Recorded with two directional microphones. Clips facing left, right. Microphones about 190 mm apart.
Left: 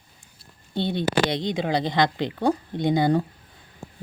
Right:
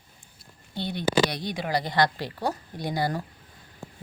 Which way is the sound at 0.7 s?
25° left (ahead or behind).